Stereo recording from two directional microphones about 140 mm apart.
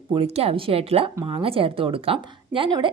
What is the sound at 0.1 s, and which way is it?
A woman's voice, 45° right (ahead or behind).